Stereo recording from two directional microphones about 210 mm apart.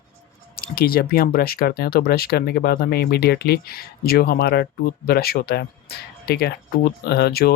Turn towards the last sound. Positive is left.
turn(degrees=50)  # may be behind; listen again after turning